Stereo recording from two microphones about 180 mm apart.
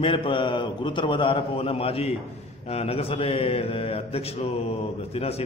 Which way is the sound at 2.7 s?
35° left (ahead or behind).